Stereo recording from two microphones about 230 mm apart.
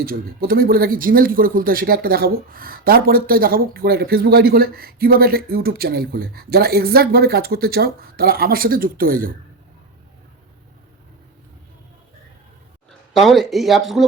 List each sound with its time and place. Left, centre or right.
0.0 s speech: right
13.1 s speech: centre